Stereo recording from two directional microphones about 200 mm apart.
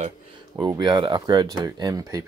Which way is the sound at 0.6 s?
20° right (ahead or behind).